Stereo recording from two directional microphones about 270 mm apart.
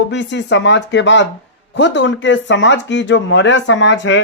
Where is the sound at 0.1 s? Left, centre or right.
Left.